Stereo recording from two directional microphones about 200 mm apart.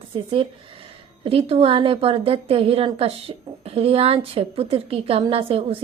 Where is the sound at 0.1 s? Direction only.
25° right (ahead or behind).